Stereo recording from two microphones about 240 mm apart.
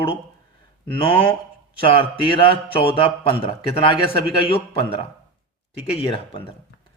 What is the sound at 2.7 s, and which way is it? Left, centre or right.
A man's voice, left.